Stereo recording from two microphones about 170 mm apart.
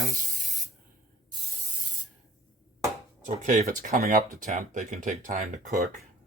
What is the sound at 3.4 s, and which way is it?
Speech, 45° right (ahead or behind).